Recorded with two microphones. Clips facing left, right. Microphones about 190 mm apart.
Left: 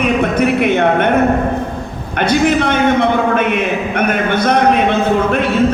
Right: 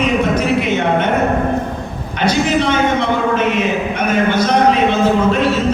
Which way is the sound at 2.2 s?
55° left (ahead or behind).